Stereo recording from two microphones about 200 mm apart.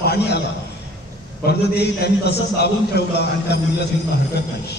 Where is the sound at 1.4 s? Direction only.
55° left (ahead or behind).